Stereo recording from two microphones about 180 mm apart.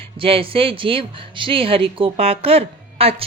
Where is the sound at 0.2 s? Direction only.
30° right (ahead or behind).